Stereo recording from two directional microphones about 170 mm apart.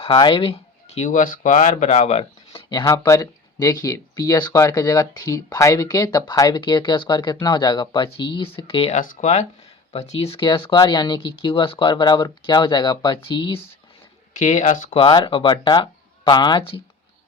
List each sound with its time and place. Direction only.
0.0 s speech: 30° left (ahead or behind)
9.0 s speech: 50° left (ahead or behind); by 13.6 s 30° left (ahead or behind)
14.3 s speech: 45° left (ahead or behind)
14.9 s speech: 25° left (ahead or behind)